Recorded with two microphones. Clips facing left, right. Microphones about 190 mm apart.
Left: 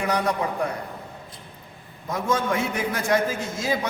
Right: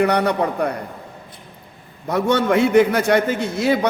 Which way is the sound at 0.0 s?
65° right (ahead or behind).